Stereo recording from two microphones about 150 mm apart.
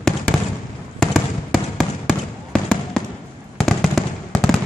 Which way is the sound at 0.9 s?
Centre (ahead or behind).